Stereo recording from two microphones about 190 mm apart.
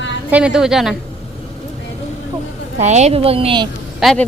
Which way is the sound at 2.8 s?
35° right (ahead or behind).